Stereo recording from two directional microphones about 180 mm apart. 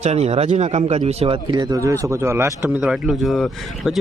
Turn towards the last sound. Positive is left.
turn(degrees=0)  # may be behind; listen again after turning